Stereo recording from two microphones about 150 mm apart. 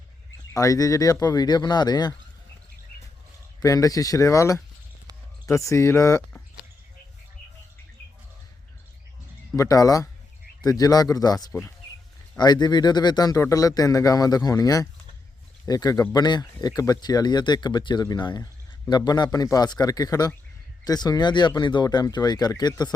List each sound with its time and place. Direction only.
0.5 s speech: 20° left (ahead or behind)
3.6 s speech: 25° left (ahead or behind)
9.6 s speech: 25° left (ahead or behind)